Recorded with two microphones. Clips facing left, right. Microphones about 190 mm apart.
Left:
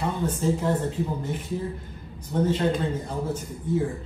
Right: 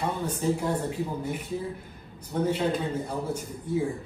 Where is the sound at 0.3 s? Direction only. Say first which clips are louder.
Left 2 dB; 10° right (ahead or behind).